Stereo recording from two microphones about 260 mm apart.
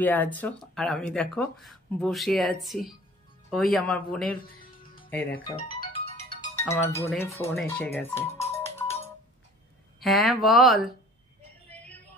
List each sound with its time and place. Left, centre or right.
0.0 s speech: centre
4.3 s music: left
5.5 s music: centre
6.7 s speech: centre
7.1 s speech: centre
10.0 s speech: centre